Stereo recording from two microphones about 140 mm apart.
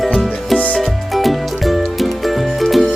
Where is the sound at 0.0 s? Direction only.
Centre (ahead or behind).